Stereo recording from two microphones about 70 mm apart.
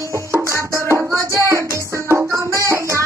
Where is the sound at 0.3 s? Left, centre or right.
Right.